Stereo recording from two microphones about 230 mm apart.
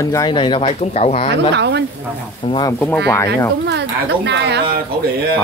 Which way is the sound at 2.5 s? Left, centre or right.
Centre.